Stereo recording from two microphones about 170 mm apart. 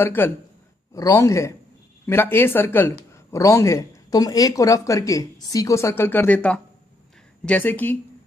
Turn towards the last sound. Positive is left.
turn(degrees=10)  # may be behind; listen again after turning